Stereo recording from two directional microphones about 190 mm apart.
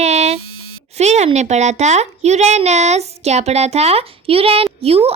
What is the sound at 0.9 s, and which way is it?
A child's voice, 35° right (ahead or behind).